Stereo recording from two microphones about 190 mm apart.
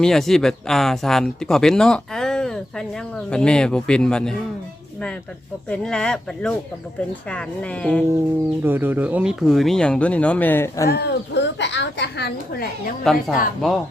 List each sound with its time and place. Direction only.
0.0 s speech: centre (ahead or behind)
5.6 s speech: 5° left (ahead or behind)
8.6 s speech: 10° right (ahead or behind); by 10.8 s 10° left (ahead or behind)
10.8 s a woman's voice: 60° left (ahead or behind)
13.1 s speech: centre (ahead or behind)